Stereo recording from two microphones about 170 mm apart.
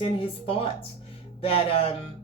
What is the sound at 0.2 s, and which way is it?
Speech, 35° left (ahead or behind).